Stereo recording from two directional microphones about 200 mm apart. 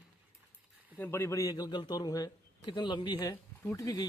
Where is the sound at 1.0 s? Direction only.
15° left (ahead or behind).